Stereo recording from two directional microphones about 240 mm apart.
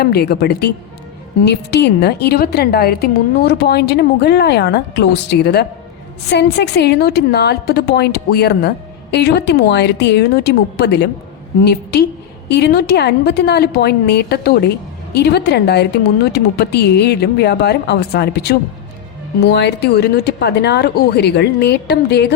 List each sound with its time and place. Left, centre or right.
0.0 s a woman's voice: left